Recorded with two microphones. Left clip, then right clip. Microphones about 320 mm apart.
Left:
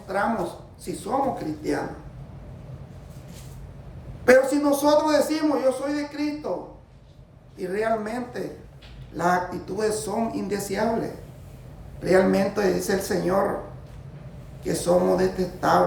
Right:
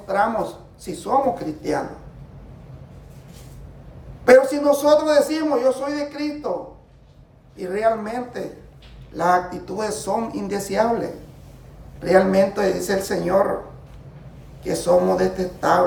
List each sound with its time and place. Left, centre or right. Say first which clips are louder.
0.1 s a man's voice: right 5 dB; centre
4.3 s a man's voice: right 4 dB; centre
7.5 s a man's voice: right 4 dB; centre
12.0 s a man's voice: right 4 dB; centre
14.6 s a man's voice: right 4 dB; centre